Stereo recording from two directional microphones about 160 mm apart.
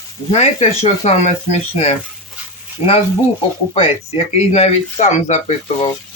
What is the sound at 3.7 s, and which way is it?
Speech, 40° left (ahead or behind).